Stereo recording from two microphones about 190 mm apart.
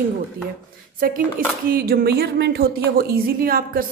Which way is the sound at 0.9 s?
50° right (ahead or behind).